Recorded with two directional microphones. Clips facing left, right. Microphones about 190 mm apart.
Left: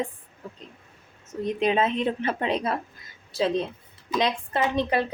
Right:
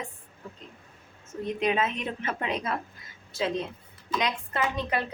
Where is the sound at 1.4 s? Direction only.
30° left (ahead or behind).